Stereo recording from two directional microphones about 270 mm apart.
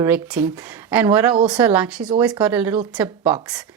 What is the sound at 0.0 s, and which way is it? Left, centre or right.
Speech, centre.